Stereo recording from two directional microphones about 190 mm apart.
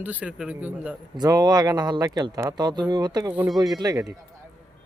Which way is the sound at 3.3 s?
5° right (ahead or behind).